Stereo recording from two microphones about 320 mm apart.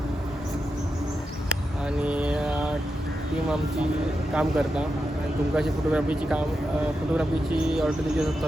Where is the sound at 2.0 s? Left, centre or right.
Centre.